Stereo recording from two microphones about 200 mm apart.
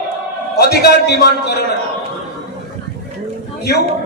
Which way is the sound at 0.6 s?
55° left (ahead or behind).